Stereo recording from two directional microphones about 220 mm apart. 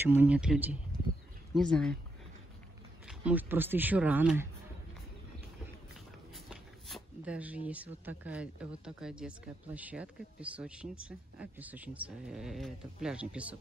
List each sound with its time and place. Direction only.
0.0 s speech: 10° right (ahead or behind)
3.1 s speech: 5° right (ahead or behind)
6.3 s speech: centre (ahead or behind)